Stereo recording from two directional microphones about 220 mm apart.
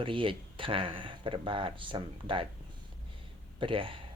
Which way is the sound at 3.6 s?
25° right (ahead or behind).